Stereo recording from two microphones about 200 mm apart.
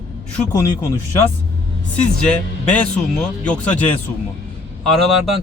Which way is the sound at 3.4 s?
5° left (ahead or behind).